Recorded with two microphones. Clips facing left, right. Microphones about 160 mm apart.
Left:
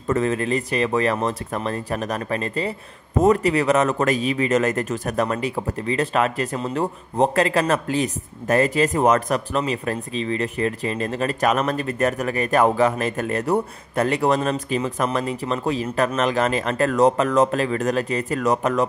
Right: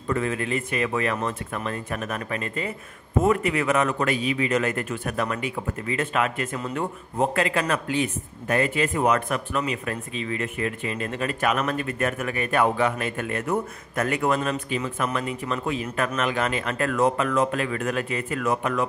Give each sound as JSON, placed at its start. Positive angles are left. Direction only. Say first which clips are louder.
{"t": 0.0, "sound": "a man's voice", "louder": "left 5 dB", "side_deg": 40}